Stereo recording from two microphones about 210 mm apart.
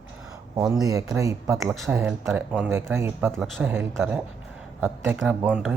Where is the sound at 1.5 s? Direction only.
Centre (ahead or behind).